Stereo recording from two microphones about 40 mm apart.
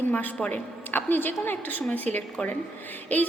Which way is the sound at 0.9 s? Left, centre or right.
Left.